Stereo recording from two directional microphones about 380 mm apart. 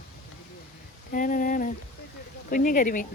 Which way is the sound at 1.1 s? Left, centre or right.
Left.